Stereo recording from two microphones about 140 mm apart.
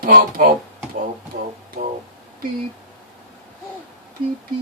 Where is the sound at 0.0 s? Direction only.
90° right.